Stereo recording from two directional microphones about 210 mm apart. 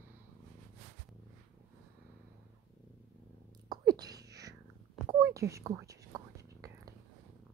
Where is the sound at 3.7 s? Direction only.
20° right (ahead or behind).